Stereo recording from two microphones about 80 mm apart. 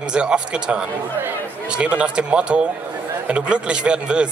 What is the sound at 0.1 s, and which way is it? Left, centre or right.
Speech, centre.